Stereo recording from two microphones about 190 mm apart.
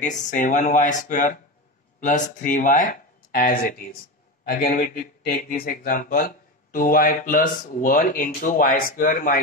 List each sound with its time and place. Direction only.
0.0 s speech: 40° left (ahead or behind)